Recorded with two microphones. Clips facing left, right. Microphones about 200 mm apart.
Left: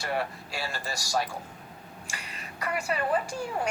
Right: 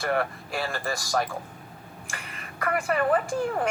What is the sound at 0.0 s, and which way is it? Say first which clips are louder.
A woman's voice: right 4 dB; 55° right (ahead or behind).